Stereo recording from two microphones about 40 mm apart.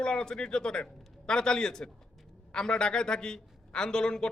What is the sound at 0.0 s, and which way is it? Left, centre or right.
A man's voice, left.